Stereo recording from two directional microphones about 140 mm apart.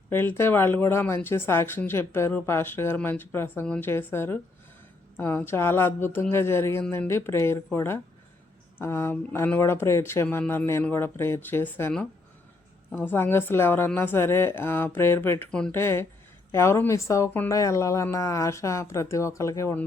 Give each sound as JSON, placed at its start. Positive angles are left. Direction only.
{"t": 0.1, "sound": "speech", "side_deg": 15}